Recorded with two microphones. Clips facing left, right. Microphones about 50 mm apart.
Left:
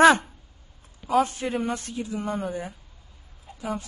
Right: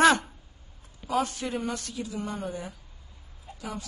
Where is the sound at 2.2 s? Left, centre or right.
Centre.